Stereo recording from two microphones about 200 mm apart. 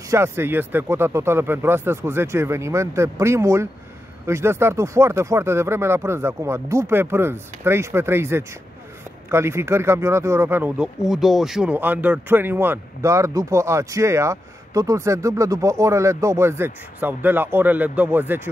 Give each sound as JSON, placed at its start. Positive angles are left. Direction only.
{"t": 0.1, "sound": "speech", "side_deg": -10}